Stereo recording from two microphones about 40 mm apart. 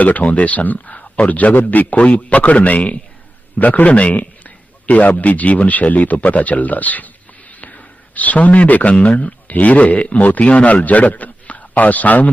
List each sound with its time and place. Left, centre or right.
0.0 s a man's voice: left
7.6 s a sound: left
9.1 s a man's voice: left